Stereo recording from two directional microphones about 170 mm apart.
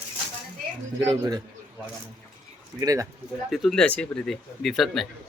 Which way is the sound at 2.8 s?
20° right (ahead or behind).